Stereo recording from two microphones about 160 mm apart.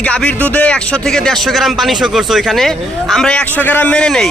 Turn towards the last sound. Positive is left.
turn(degrees=5)  # may be behind; listen again after turning